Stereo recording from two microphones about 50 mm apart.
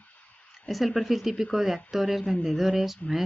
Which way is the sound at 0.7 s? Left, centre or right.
Centre.